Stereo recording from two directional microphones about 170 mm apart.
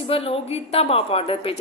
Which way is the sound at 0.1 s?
35° left (ahead or behind).